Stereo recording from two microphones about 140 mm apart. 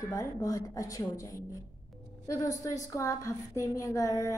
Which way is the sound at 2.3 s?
25° left (ahead or behind).